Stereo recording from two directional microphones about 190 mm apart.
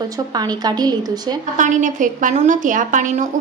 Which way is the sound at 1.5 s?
40° right (ahead or behind).